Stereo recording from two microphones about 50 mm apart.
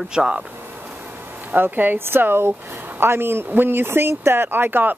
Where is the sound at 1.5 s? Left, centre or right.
Right.